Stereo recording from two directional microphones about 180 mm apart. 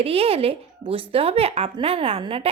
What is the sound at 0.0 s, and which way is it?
A woman's voice, 35° right (ahead or behind).